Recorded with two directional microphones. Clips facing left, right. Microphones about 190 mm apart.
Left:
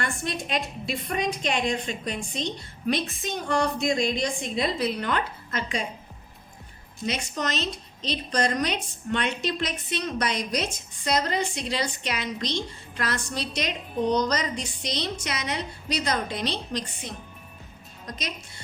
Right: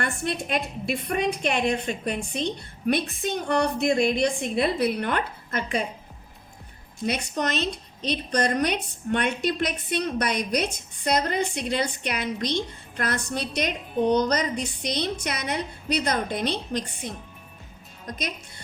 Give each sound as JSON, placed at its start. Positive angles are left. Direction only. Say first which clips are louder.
{"t": 0.3, "sound": "a woman's voice", "louder": "right 3 dB", "side_deg": -55}
{"t": 7.0, "sound": "a woman's voice", "louder": "right 3 dB", "side_deg": -55}